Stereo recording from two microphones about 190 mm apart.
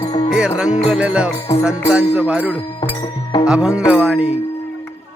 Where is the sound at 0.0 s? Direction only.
20° left (ahead or behind).